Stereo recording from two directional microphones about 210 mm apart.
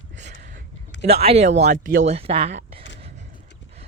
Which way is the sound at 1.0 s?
30° right (ahead or behind).